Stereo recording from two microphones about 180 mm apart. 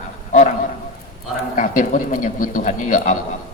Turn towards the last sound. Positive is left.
turn(degrees=45)  # may be behind; listen again after turning